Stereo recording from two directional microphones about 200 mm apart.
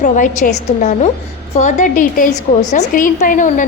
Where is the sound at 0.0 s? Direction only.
40° left (ahead or behind).